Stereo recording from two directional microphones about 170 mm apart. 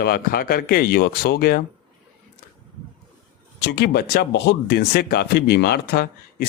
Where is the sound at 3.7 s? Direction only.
70° left (ahead or behind).